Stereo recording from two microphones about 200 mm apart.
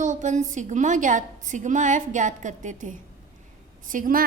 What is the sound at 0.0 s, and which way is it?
A woman's voice, 40° right (ahead or behind).